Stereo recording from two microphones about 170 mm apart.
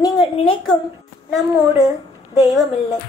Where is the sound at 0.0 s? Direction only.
25° left (ahead or behind).